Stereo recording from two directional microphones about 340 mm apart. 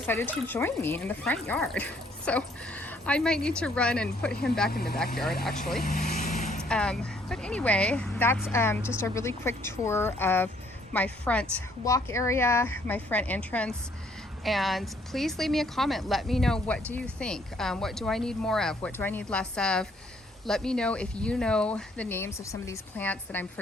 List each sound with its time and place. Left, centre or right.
0.0 s a woman's voice: centre
4.3 s speech: left
5.8 s vehicle: left
6.7 s a woman's voice: centre